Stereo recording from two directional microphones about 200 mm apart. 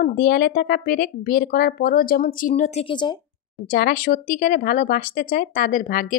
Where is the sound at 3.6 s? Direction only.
45° left (ahead or behind).